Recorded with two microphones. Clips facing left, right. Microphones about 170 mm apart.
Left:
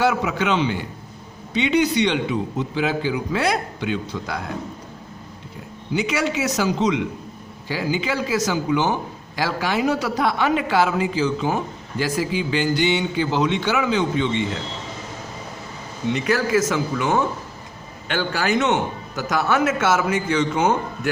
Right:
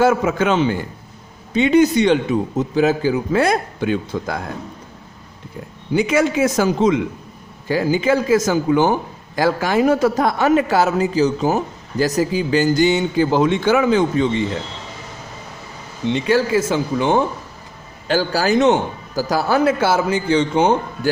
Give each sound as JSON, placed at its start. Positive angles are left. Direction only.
{"t": 0.0, "sound": "a man's voice", "side_deg": -45}
{"t": 5.9, "sound": "a man's voice", "side_deg": -50}
{"t": 16.0, "sound": "a man's voice", "side_deg": -25}